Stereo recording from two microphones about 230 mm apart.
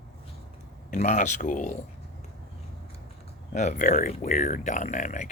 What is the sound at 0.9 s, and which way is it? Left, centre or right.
Speech, left.